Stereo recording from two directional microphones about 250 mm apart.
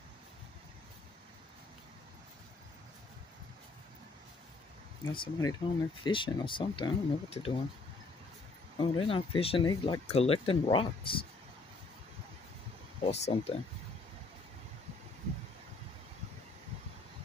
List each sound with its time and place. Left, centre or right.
5.1 s speech: centre
8.7 s speech: centre
13.0 s speech: left